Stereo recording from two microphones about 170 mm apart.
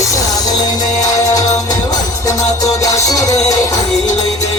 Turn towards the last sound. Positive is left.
turn(degrees=20)  # may be behind; listen again after turning